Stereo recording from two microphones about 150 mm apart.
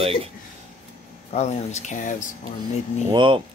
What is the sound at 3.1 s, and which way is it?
Speech, 35° right (ahead or behind).